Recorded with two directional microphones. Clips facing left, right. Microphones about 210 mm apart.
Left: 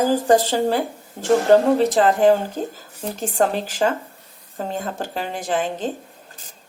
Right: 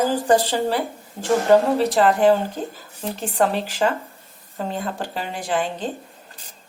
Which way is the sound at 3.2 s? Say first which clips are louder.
Left 1 dB; 40° left (ahead or behind).